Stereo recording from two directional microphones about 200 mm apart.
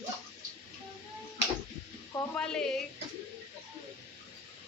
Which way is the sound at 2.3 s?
5° left (ahead or behind).